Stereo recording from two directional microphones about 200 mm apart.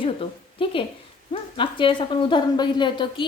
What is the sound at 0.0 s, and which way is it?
A woman's voice, 25° left (ahead or behind).